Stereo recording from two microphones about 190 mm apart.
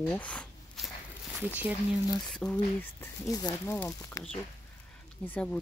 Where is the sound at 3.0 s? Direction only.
15° left (ahead or behind).